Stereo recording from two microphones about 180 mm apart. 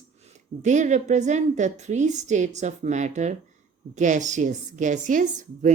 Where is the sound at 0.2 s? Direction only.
40° right (ahead or behind).